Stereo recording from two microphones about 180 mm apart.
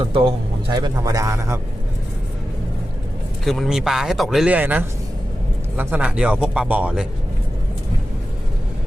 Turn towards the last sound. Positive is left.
turn(degrees=-5)  # may be behind; listen again after turning